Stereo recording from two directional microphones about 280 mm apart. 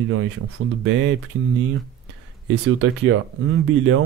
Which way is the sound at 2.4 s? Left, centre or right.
Right.